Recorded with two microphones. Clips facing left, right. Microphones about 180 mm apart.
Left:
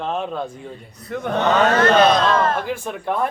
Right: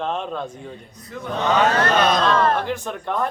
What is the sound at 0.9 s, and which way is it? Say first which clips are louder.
Speech: left 5 dB; 65° left (ahead or behind).